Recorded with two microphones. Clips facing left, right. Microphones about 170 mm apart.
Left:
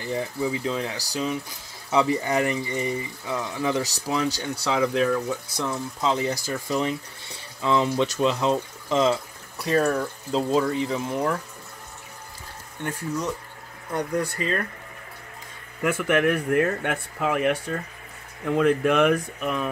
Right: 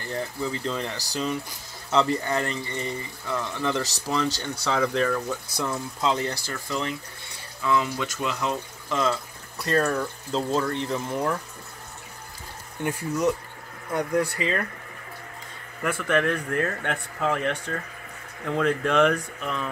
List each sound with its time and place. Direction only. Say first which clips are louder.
0.0 s speech: left 3 dB; 10° left (ahead or behind)
9.6 s speech: left 2 dB; 5° left (ahead or behind)
13.9 s speech: right 2 dB; 10° right (ahead or behind)
15.8 s speech: left 3 dB; 10° left (ahead or behind)